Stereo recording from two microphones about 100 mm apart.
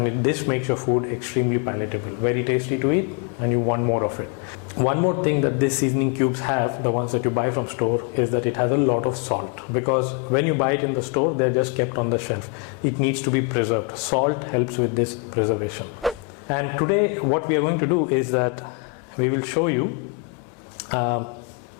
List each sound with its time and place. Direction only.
0.0 s a man's voice: 15° left (ahead or behind)
16.0 s a sound: centre (ahead or behind)
16.5 s a man's voice: 15° left (ahead or behind)
20.9 s speech: 20° left (ahead or behind)